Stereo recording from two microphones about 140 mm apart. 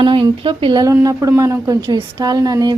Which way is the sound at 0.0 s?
35° right (ahead or behind).